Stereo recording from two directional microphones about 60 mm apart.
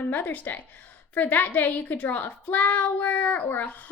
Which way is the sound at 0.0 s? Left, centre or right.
Left.